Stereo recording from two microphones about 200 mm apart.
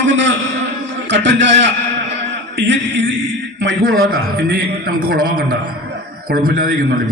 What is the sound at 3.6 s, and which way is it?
Speech, 80° right.